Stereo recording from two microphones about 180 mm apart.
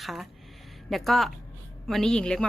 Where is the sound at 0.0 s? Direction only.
Centre (ahead or behind).